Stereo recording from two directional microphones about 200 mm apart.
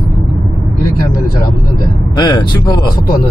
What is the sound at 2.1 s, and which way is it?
Speech, 20° left (ahead or behind).